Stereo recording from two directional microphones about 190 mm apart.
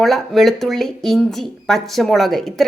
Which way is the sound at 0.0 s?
Centre (ahead or behind).